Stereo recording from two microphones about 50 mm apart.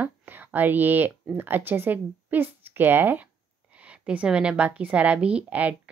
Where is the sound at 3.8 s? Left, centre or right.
Right.